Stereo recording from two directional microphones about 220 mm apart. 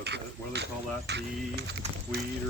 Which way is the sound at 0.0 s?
50° right (ahead or behind).